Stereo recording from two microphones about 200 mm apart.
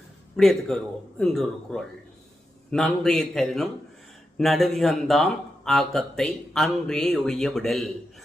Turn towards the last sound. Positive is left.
turn(degrees=0)  # may be behind; listen again after turning